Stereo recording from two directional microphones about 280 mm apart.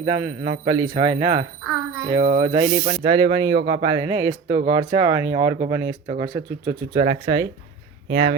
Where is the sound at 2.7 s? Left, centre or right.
Right.